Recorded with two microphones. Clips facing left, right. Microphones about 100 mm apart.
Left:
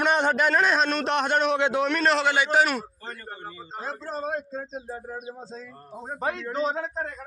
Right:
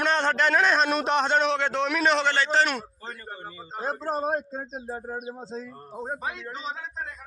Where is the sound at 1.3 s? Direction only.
10° left (ahead or behind).